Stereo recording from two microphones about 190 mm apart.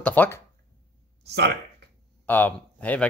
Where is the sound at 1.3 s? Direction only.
60° right (ahead or behind).